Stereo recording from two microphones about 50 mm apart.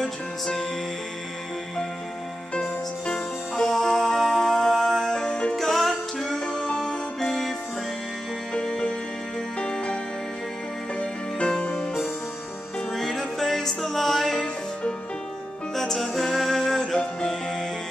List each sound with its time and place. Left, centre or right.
0.0 s music: centre
3.1 s music: centre
5.6 s music: centre
8.5 s music: centre
11.0 s music: left
11.7 s music: centre
15.7 s music: centre